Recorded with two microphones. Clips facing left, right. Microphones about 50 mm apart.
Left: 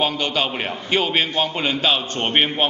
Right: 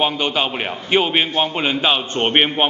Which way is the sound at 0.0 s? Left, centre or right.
Centre.